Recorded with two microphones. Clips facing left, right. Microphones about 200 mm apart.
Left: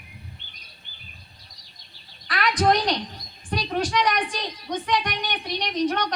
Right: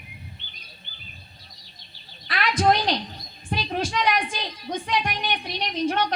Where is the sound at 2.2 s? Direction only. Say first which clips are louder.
Even; 25° right (ahead or behind).